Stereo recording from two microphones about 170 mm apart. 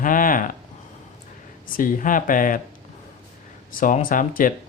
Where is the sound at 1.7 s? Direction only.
55° left (ahead or behind).